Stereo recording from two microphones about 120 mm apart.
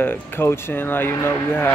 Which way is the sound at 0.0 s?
20° left (ahead or behind).